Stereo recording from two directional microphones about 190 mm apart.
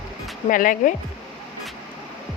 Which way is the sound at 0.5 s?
45° left (ahead or behind).